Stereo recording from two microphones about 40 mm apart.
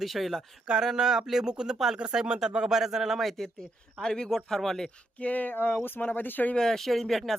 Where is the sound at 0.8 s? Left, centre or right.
Centre.